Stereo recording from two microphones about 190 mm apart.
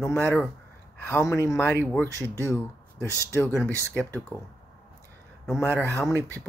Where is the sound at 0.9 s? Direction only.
10° left (ahead or behind).